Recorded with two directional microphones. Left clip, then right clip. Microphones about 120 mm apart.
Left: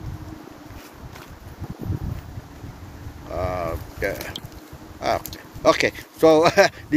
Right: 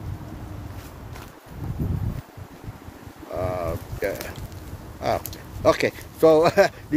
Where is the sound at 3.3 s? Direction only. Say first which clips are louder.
Left 1 dB; 25° right (ahead or behind).